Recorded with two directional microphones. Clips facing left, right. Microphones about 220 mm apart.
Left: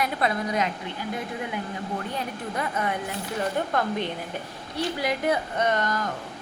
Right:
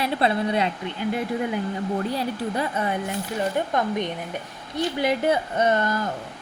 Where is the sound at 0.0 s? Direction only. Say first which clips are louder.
Right 3 dB; 30° right (ahead or behind).